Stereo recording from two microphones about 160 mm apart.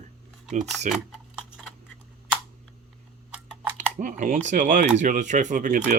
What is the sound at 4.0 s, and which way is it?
Speech, 55° right (ahead or behind).